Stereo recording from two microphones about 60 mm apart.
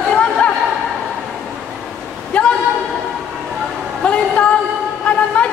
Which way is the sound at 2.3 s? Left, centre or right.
Centre.